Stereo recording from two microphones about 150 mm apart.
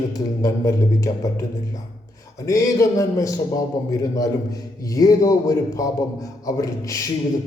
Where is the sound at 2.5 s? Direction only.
20° left (ahead or behind).